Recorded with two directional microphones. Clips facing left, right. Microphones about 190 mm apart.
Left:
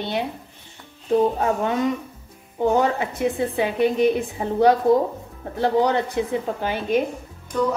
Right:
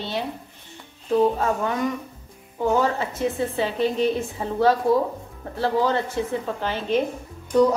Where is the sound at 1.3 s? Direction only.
20° left (ahead or behind).